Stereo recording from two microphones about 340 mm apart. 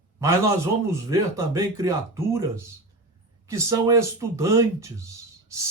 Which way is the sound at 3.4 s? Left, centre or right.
Centre.